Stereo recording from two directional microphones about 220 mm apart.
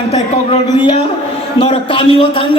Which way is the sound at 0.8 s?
20° left (ahead or behind).